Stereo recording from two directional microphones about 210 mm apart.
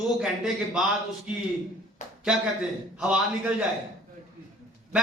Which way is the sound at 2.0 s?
35° left (ahead or behind).